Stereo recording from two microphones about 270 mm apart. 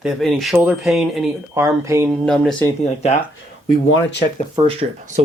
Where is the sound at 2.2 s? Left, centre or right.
Centre.